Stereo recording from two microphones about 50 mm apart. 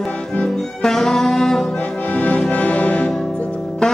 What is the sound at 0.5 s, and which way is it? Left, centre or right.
Music, centre.